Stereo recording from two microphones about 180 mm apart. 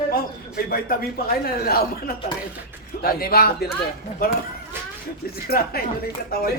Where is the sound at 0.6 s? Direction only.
55° left (ahead or behind).